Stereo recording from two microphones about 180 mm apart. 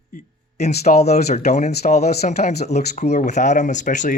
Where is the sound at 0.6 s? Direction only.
40° left (ahead or behind).